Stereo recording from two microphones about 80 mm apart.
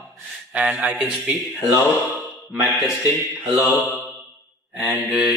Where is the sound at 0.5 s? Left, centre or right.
Centre.